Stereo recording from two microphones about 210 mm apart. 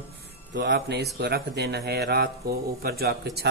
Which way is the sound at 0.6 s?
50° right (ahead or behind).